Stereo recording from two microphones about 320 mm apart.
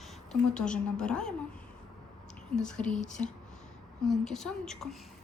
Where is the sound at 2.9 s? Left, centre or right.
Left.